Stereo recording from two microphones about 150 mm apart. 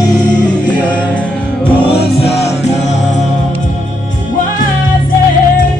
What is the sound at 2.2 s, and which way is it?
Music, 45° left (ahead or behind).